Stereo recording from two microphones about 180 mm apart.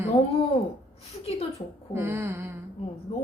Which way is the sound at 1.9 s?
10° right (ahead or behind).